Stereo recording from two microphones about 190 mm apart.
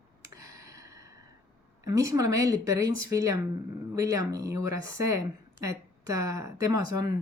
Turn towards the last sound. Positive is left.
turn(degrees=-20)  # may be behind; listen again after turning